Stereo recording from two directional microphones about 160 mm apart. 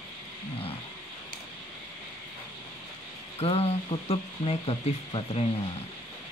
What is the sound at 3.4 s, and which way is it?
Speech, 40° left (ahead or behind).